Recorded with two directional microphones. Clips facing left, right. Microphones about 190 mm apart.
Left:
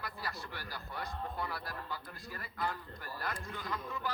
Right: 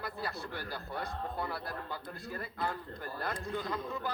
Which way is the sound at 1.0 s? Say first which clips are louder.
Right 2 dB; 25° right (ahead or behind).